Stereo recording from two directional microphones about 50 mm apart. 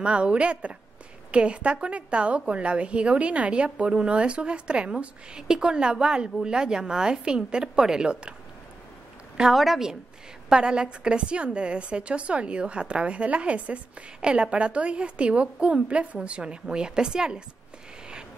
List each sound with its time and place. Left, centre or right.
0.0 s a woman's voice: right
9.5 s a woman's voice: centre
10.5 s a woman's voice: centre